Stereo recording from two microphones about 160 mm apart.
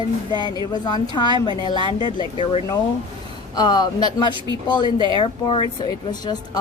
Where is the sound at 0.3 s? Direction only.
25° left (ahead or behind).